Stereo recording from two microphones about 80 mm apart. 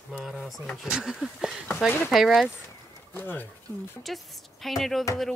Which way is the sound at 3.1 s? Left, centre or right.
Left.